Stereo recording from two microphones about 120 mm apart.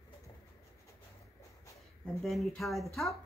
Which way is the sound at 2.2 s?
Centre (ahead or behind).